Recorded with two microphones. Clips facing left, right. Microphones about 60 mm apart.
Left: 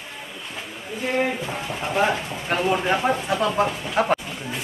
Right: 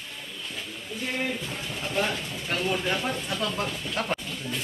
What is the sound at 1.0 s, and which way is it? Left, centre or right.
Speech, left.